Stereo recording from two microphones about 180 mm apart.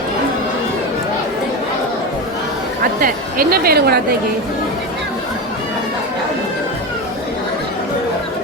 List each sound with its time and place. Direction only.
3.0 s speech: 55° right (ahead or behind)